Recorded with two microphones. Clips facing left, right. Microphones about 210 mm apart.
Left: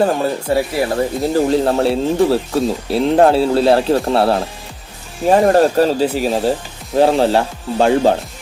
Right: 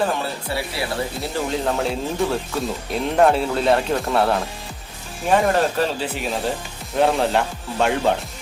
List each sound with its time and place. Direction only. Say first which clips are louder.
0.0 s speech: left 7 dB; 40° left (ahead or behind)